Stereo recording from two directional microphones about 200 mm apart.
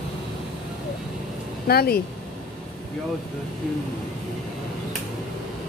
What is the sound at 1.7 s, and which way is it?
Speech, 50° left (ahead or behind).